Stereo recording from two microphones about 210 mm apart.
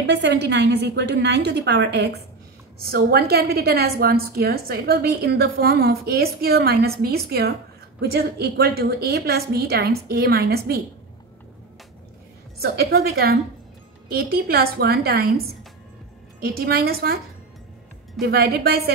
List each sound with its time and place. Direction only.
0.0 s a woman's voice: 55° right (ahead or behind)
12.6 s a woman's voice: 50° right (ahead or behind)
18.2 s a woman's voice: 45° right (ahead or behind)